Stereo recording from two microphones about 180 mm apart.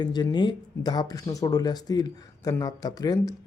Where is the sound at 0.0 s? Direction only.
25° left (ahead or behind).